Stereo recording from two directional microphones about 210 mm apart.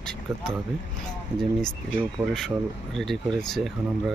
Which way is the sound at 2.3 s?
Centre (ahead or behind).